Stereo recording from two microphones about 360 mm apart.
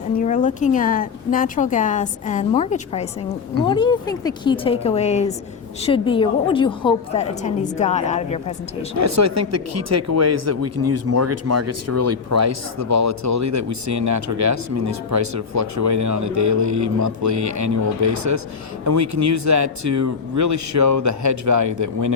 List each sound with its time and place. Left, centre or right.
0.2 s a woman's voice: left
9.0 s speech: right